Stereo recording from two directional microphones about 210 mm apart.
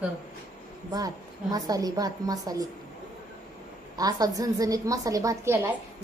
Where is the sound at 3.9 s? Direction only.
15° right (ahead or behind).